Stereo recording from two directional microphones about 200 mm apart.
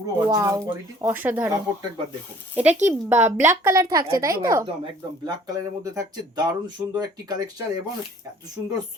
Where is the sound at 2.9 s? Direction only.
10° right (ahead or behind).